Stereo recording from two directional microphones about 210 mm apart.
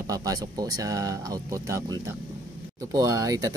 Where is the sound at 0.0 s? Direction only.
15° right (ahead or behind).